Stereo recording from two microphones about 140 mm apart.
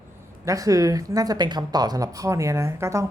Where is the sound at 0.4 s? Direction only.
25° right (ahead or behind).